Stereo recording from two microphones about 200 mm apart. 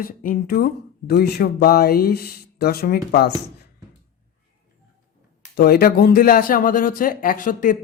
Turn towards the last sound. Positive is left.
turn(degrees=40)  # may be behind; listen again after turning